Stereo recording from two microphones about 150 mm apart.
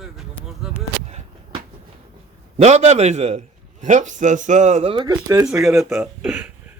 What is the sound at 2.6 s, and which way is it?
A man's voice, 50° right (ahead or behind).